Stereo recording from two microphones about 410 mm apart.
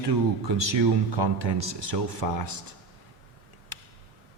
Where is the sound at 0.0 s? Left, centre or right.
Right.